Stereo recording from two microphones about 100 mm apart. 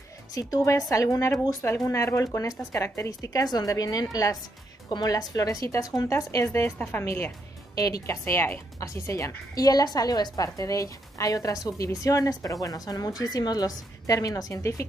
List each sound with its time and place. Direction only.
0.3 s speech: 40° left (ahead or behind); by 7.3 s 20° left (ahead or behind)
7.7 s speech: 35° left (ahead or behind)